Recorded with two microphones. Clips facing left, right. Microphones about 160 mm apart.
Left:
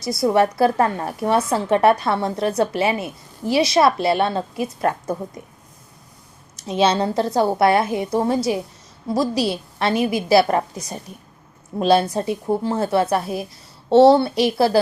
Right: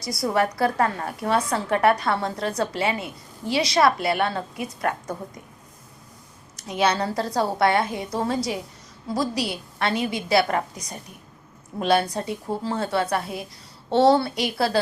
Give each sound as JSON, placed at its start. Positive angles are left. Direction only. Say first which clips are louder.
{"t": 0.0, "sound": "a woman's voice", "louder": "left 6 dB", "side_deg": 25}
{"t": 6.6, "sound": "a woman's voice", "louder": "left 4 dB", "side_deg": 25}